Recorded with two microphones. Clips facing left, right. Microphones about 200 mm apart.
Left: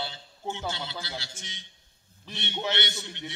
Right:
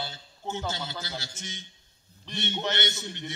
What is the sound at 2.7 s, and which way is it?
Speech, 45° right (ahead or behind).